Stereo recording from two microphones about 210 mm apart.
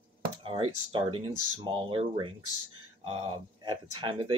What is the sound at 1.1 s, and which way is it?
Speech, 25° right (ahead or behind).